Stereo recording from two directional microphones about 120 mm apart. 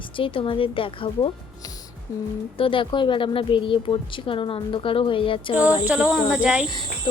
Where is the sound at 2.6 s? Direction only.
45° left (ahead or behind).